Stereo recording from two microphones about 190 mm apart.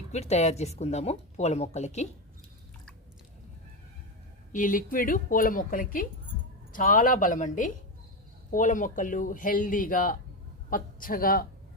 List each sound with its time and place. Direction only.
0.1 s speech: 35° left (ahead or behind)
4.5 s speech: 45° left (ahead or behind)